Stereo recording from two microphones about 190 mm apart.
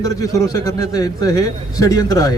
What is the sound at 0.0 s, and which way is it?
A man's voice, 15° left (ahead or behind).